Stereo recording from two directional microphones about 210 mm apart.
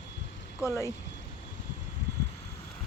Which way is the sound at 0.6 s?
15° left (ahead or behind).